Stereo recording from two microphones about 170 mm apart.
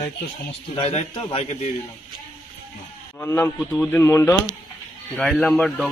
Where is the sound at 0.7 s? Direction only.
30° left (ahead or behind).